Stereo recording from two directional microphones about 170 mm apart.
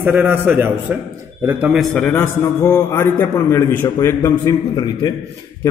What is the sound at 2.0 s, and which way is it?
A man's voice, 15° left (ahead or behind).